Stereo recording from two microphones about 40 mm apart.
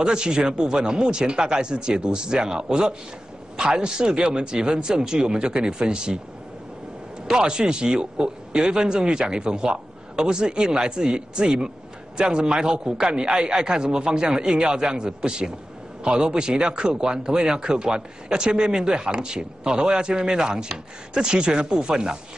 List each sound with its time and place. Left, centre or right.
0.0 s speech: centre
7.2 s speech: right